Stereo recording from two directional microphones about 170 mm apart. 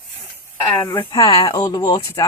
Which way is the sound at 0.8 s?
15° left (ahead or behind).